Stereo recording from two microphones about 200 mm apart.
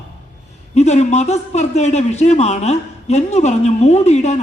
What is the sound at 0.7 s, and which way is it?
A man's voice, 35° left (ahead or behind).